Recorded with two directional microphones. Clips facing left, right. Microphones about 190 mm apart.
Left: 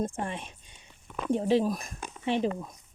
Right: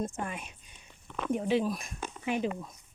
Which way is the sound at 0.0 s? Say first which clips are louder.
Left 3 dB; 30° left (ahead or behind).